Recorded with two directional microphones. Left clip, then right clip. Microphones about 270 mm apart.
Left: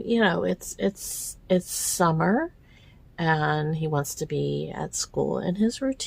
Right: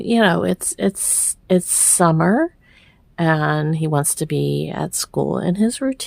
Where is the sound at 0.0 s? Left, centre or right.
Right.